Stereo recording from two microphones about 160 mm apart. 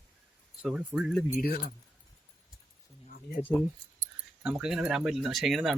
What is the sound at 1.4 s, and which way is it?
Speech, 65° left (ahead or behind).